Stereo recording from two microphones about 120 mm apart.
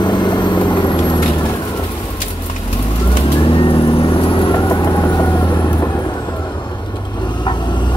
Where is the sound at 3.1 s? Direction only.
50° left (ahead or behind).